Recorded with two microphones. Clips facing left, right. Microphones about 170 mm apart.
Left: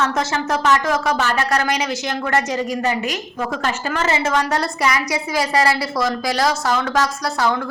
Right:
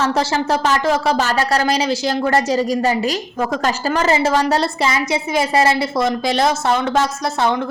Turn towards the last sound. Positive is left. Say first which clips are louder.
# right 2 dB
turn(degrees=-25)  # may be behind; listen again after turning